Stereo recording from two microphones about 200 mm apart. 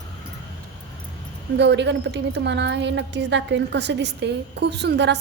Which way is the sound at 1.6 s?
60° right (ahead or behind).